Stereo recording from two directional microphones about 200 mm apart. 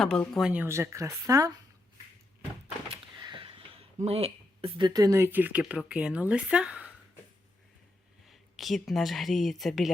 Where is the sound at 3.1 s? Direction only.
25° right (ahead or behind).